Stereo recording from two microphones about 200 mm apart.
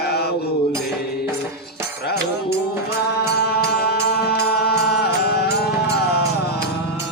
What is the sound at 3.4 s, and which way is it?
Music, 55° left (ahead or behind).